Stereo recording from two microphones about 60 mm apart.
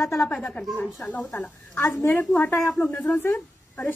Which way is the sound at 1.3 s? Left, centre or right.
Left.